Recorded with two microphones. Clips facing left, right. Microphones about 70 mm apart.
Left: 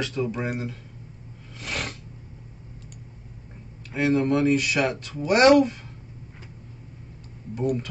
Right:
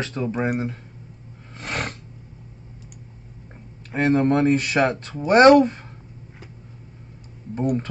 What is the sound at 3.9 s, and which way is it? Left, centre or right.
Speech, right.